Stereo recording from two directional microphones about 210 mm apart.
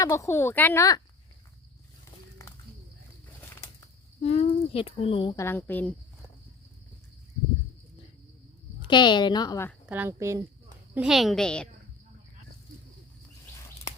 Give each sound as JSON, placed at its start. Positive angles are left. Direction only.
{"t": 0.0, "sound": "speech", "side_deg": 15}
{"t": 3.4, "sound": "bird flight", "side_deg": 15}
{"t": 4.2, "sound": "speech", "side_deg": 30}
{"t": 5.5, "sound": "speech", "side_deg": 10}
{"t": 8.8, "sound": "speech", "side_deg": 20}
{"t": 9.8, "sound": "speech", "side_deg": -10}
{"t": 10.9, "sound": "a woman's voice", "side_deg": -5}